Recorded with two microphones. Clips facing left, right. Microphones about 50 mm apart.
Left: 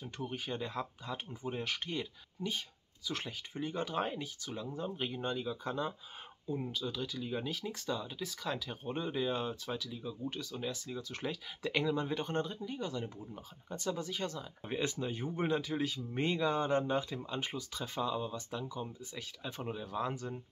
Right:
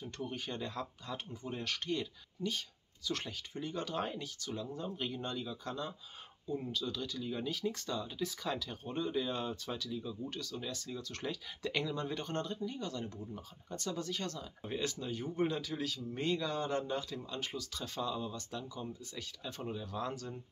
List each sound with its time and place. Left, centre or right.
0.2 s speech: centre